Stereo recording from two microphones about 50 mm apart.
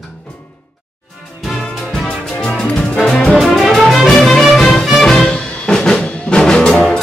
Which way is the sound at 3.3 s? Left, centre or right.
Centre.